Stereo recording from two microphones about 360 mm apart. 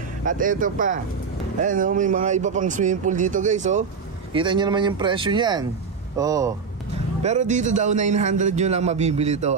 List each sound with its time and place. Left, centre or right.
0.2 s a man's voice: right